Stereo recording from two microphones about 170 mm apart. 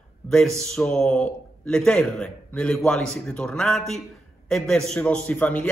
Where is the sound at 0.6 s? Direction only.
5° left (ahead or behind).